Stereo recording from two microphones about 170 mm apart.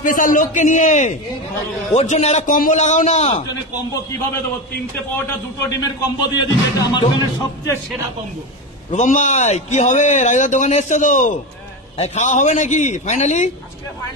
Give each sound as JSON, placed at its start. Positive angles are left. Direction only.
{"t": 0.0, "sound": "a man's voice", "side_deg": 55}
{"t": 5.3, "sound": "speech", "side_deg": 20}
{"t": 8.9, "sound": "a man's voice", "side_deg": 45}